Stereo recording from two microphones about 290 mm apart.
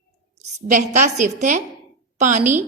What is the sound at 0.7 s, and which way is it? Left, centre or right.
A woman's voice, right.